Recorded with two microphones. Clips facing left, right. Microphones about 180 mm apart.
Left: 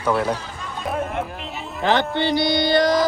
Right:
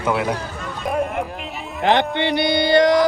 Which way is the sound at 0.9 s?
Centre (ahead or behind).